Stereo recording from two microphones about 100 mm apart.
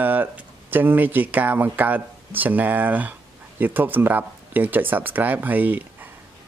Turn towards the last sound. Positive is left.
turn(degrees=-15)  # may be behind; listen again after turning